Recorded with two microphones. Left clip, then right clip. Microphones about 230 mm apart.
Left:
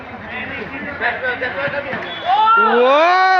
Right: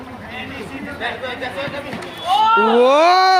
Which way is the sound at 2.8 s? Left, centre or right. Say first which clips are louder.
Even; right.